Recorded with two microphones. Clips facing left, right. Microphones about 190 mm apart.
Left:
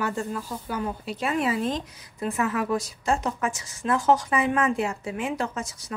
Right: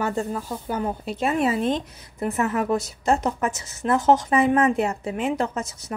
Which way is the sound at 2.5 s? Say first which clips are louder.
Right 3 dB; 25° right (ahead or behind).